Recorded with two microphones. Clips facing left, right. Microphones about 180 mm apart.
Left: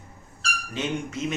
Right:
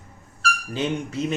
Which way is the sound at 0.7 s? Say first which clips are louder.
Right 2 dB; 35° right (ahead or behind).